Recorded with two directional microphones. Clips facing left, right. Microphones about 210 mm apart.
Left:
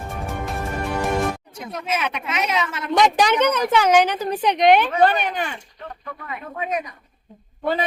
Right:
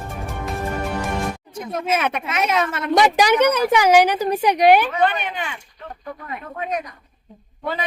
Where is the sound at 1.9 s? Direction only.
50° right (ahead or behind).